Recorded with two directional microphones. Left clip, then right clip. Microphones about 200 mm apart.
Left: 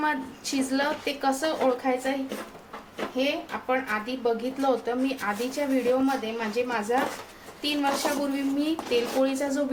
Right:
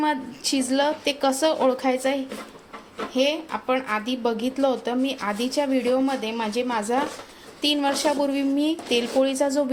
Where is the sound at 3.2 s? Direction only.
50° right (ahead or behind).